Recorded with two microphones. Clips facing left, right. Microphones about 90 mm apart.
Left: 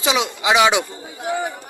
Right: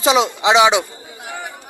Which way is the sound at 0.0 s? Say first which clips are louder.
Right 5 dB; 35° right (ahead or behind).